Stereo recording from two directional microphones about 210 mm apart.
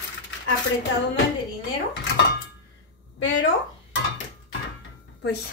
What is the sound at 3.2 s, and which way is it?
Speech, 60° left (ahead or behind).